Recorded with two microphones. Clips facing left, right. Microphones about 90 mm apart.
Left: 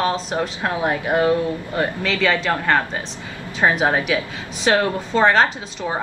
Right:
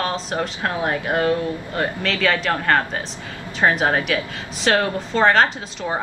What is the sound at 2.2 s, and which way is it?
Speech, 5° left (ahead or behind).